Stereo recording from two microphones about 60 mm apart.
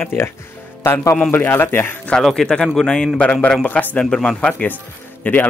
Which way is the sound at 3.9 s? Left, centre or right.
Centre.